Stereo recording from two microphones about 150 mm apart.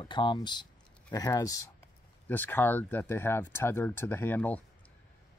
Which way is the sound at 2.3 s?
15° left (ahead or behind).